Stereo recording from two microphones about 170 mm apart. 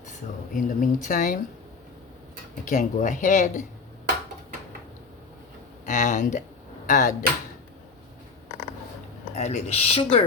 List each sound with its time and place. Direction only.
0.5 s speech: 50° left (ahead or behind)
2.6 s speech: 50° left (ahead or behind)
5.8 s speech: 50° left (ahead or behind)
9.3 s speech: 40° left (ahead or behind)